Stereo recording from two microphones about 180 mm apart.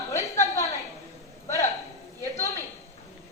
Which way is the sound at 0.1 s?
15° left (ahead or behind).